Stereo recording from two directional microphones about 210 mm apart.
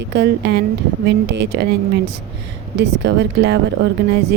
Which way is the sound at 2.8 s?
55° right (ahead or behind).